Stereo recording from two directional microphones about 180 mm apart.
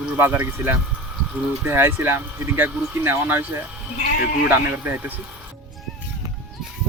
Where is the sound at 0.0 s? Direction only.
10° right (ahead or behind).